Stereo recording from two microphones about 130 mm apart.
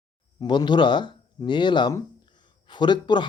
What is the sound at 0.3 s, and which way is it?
A man's voice, 35° left (ahead or behind).